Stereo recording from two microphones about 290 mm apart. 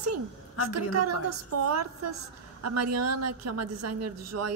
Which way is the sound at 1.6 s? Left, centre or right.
Right.